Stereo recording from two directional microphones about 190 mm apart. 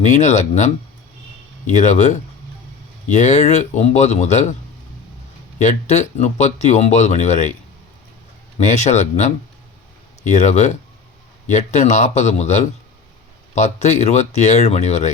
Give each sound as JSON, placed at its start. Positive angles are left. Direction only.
{"t": 0.0, "sound": "speech", "side_deg": 40}
{"t": 1.7, "sound": "speech", "side_deg": 40}
{"t": 5.5, "sound": "speech", "side_deg": 35}
{"t": 8.5, "sound": "speech", "side_deg": 35}
{"t": 10.3, "sound": "speech", "side_deg": 40}